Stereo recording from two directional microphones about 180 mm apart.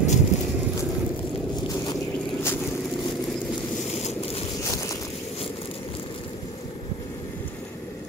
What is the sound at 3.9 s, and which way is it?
Boat, 35° left (ahead or behind).